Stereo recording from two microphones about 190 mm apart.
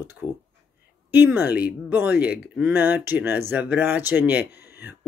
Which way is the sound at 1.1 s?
10° right (ahead or behind).